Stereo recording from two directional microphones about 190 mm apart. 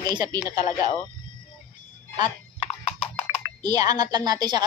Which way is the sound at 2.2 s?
30° left (ahead or behind).